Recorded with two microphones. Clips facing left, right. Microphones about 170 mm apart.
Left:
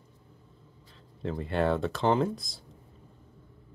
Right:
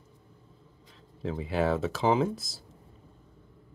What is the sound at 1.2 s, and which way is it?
Speech, centre (ahead or behind).